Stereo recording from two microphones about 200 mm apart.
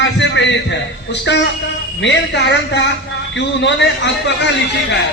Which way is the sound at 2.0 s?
60° left (ahead or behind).